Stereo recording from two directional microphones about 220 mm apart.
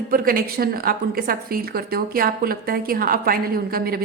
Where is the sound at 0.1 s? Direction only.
40° right (ahead or behind).